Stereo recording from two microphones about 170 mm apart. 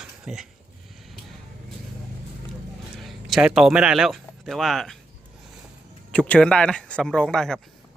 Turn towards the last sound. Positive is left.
turn(degrees=5)  # may be behind; listen again after turning